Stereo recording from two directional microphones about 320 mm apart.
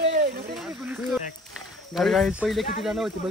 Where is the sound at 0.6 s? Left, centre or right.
Centre.